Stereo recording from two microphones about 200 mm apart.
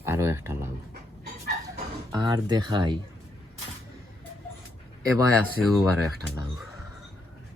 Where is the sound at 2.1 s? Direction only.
20° right (ahead or behind).